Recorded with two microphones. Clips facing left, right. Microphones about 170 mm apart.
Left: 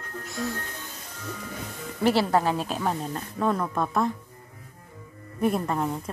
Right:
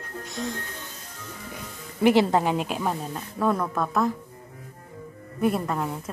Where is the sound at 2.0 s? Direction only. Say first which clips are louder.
Right 3 dB; 15° right (ahead or behind).